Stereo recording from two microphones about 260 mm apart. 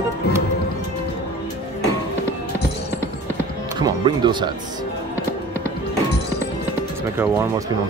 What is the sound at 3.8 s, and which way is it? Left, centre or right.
Speech, centre.